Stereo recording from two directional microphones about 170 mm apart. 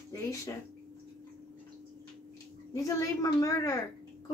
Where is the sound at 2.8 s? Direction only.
20° left (ahead or behind).